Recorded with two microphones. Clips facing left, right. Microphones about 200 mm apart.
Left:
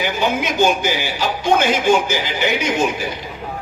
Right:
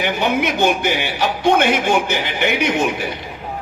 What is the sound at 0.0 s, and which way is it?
Speech, 60° right (ahead or behind).